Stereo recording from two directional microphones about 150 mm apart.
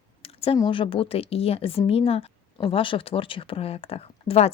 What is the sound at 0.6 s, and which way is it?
Speech, 35° left (ahead or behind).